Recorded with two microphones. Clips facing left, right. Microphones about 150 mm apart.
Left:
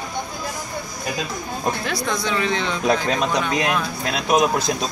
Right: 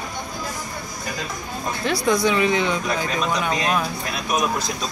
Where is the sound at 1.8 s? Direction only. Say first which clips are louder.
Right 5 dB; 5° right (ahead or behind).